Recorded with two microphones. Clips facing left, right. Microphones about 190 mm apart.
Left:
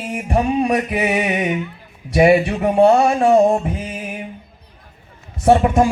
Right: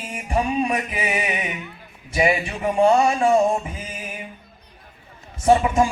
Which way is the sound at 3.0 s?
60° left (ahead or behind).